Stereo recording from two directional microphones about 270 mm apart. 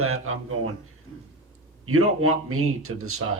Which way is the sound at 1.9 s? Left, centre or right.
Right.